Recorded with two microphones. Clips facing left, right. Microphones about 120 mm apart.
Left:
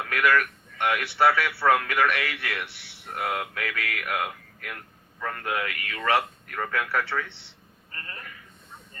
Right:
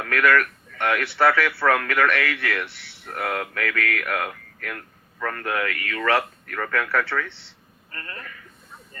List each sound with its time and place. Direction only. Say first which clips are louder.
0.0 s speech: right 3 dB; 15° left (ahead or behind)
3.1 s speech: right 2 dB; 90° right
3.5 s speech: right 6 dB; 15° left (ahead or behind)